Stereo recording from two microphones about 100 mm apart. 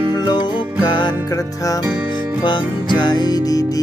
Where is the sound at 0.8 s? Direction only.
50° left (ahead or behind).